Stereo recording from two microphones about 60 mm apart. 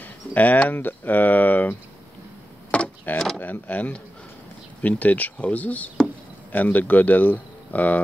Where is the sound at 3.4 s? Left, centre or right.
Left.